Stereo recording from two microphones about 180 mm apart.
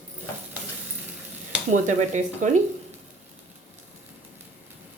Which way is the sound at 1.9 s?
45° right (ahead or behind).